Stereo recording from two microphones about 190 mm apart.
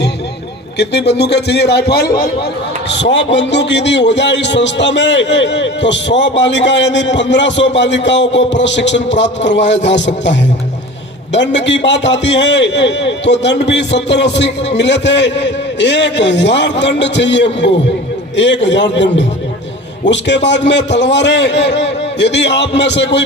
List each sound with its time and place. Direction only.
0.8 s a man's voice: 60° left (ahead or behind)
2.9 s a man's voice: 70° left (ahead or behind)